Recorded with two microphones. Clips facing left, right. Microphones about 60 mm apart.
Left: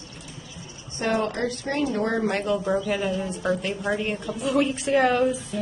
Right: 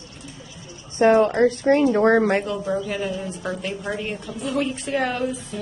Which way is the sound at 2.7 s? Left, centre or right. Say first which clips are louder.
Left 1 dB; centre.